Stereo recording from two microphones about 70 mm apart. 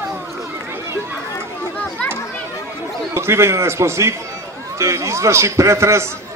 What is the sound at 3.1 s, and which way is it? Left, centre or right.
A man's voice, right.